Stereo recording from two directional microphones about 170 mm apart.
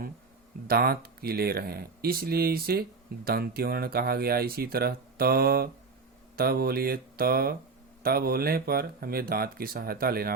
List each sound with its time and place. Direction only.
0.7 s speech: 65° right (ahead or behind)